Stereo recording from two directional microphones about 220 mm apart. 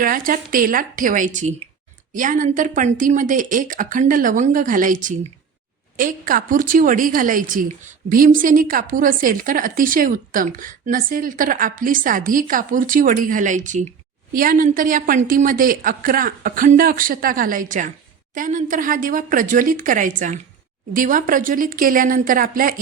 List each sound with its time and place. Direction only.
0.0 s a woman's voice: 40° right (ahead or behind)